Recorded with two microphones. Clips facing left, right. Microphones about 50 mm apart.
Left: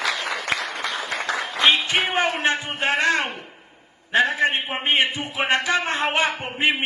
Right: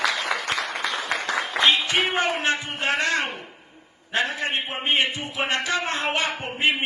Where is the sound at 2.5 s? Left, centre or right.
Left.